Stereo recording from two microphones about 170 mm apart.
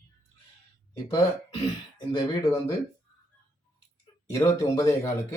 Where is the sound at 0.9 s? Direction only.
20° left (ahead or behind).